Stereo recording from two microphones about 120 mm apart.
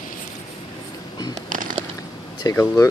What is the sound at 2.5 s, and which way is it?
Speech, 30° left (ahead or behind).